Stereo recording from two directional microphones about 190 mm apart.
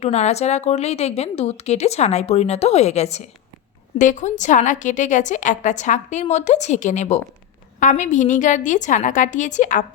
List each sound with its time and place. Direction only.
0.0 s a woman's voice: 35° left (ahead or behind)